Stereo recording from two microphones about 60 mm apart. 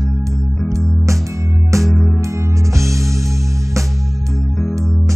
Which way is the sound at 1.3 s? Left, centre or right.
Right.